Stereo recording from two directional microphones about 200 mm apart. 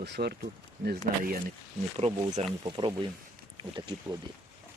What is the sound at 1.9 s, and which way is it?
Speech, 35° right (ahead or behind).